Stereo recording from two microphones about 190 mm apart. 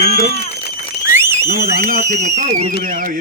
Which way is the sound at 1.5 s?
55° right (ahead or behind).